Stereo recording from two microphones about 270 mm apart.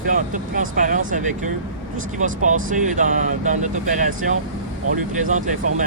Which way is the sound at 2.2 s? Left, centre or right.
Right.